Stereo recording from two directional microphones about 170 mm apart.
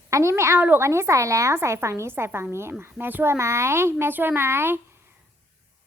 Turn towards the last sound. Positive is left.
turn(degrees=-15)  # may be behind; listen again after turning